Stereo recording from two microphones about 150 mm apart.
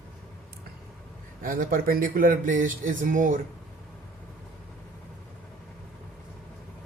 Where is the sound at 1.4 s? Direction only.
65° right (ahead or behind).